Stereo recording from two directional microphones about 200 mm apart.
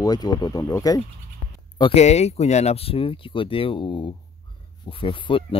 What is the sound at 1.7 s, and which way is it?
Speech, 30° left (ahead or behind).